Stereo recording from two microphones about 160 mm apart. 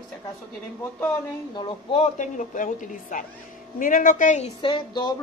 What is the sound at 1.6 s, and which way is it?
A woman's voice, 35° left (ahead or behind).